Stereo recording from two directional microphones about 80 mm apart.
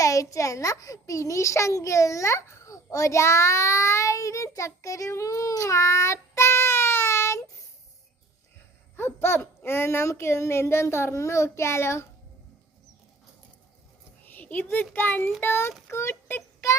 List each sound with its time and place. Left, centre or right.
0.0 s a child's voice: left
9.0 s speech: left
14.3 s a sound: left
14.9 s a child's voice: left
15.9 s child singing: left